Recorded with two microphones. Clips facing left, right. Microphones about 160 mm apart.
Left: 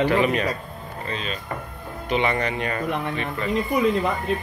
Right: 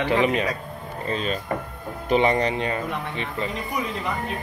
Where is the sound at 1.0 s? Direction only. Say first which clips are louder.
Right 5 dB; 40° right (ahead or behind); by 3.4 s 25° right (ahead or behind).